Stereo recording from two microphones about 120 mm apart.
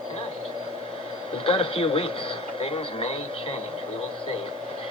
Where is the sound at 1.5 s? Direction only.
50° left (ahead or behind).